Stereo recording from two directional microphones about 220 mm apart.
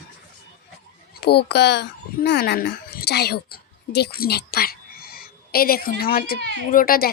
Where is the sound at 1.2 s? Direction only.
45° left (ahead or behind).